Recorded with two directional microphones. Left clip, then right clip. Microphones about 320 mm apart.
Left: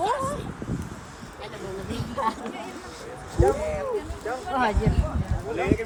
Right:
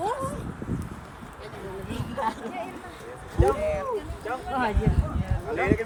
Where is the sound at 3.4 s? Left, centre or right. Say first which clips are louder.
Left 1 dB; right.